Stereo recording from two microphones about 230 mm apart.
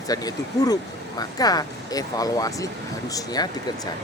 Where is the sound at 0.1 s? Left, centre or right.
Centre.